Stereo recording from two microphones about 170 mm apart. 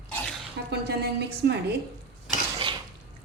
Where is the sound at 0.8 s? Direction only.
75° right (ahead or behind).